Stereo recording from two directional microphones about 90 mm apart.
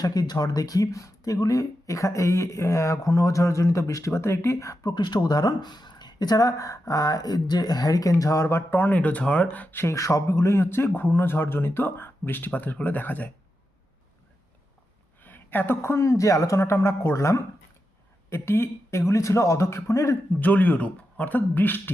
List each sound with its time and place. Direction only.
0.0 s speech: 45° left (ahead or behind)
4.9 s speech: 55° left (ahead or behind); by 9.8 s 15° left (ahead or behind)
9.8 s speech: 35° left (ahead or behind)
15.2 s speech: 20° left (ahead or behind)
20.4 s speech: 20° left (ahead or behind)